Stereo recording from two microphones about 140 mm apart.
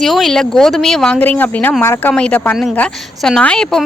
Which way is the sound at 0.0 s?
Centre (ahead or behind).